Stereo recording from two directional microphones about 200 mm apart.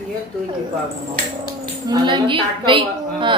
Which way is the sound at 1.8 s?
20° right (ahead or behind).